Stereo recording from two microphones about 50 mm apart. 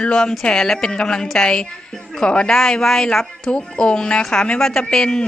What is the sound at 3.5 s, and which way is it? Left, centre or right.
Speech, centre.